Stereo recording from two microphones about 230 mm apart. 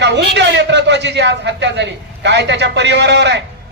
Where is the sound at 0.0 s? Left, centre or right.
Right.